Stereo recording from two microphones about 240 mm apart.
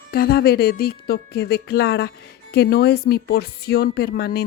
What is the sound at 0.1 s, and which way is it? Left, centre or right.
A woman's voice, left.